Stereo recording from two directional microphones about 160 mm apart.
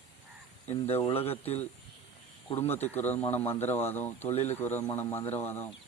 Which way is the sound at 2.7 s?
10° left (ahead or behind).